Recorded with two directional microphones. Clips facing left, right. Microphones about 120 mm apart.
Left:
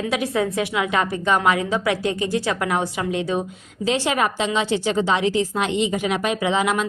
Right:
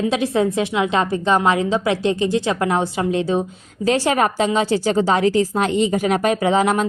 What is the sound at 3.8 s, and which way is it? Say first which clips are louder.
A woman's voice: right 4 dB; 45° right (ahead or behind).